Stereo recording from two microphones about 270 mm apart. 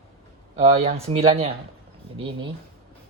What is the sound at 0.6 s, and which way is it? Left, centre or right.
Speech, right.